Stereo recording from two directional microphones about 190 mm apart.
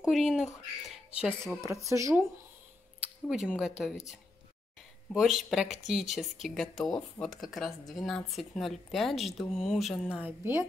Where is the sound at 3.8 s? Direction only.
Centre (ahead or behind).